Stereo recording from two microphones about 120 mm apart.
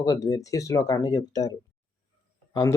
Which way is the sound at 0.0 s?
30° left (ahead or behind).